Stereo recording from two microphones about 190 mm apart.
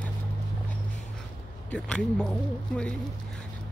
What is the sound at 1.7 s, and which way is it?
Speech, 5° left (ahead or behind).